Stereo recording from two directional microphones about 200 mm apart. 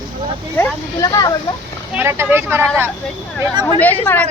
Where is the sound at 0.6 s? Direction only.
15° left (ahead or behind).